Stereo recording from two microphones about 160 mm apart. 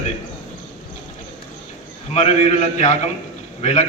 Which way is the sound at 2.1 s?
45° left (ahead or behind).